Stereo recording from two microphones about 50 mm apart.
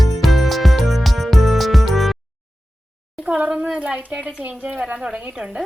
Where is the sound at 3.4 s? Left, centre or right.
Centre.